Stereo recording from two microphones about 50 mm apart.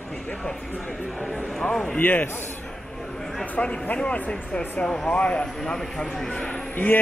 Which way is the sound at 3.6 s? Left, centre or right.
Centre.